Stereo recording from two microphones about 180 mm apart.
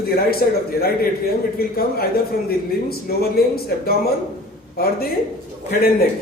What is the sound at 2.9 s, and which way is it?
Speech, 60° left (ahead or behind).